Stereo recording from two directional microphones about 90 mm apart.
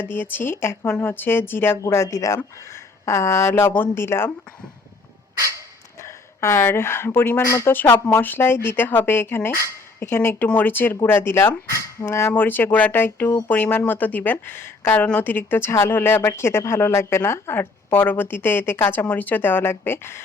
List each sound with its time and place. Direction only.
0.0 s speech: 20° left (ahead or behind)
6.4 s speech: 30° left (ahead or behind)
7.7 s speech: 20° left (ahead or behind)